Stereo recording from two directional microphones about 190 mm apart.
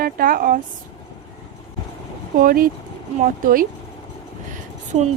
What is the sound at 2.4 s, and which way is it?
Speech, 50° right (ahead or behind).